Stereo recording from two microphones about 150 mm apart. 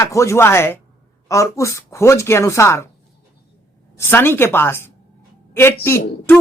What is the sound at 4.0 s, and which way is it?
Speech, 15° left (ahead or behind).